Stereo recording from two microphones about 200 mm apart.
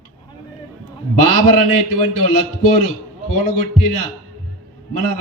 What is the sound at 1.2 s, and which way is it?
A man's voice, 40° left (ahead or behind).